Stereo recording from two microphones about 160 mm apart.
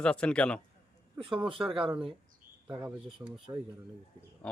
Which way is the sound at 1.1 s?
35° right (ahead or behind).